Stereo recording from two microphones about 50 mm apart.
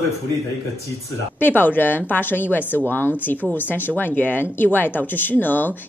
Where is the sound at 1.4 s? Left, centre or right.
Left.